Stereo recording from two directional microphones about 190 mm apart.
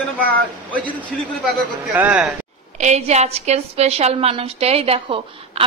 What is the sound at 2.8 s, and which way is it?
A woman's voice, 35° right (ahead or behind).